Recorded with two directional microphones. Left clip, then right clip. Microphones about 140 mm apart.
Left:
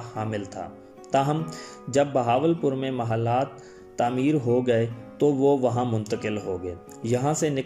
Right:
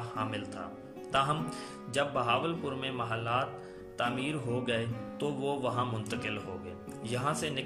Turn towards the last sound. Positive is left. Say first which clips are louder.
# left 9 dB
turn(degrees=45)  # may be behind; listen again after turning